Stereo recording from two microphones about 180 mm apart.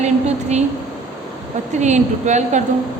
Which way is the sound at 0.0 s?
40° right (ahead or behind).